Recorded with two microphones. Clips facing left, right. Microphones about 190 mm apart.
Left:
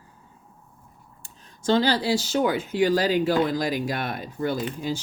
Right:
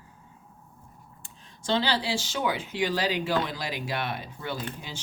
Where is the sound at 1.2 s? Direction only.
45° left (ahead or behind).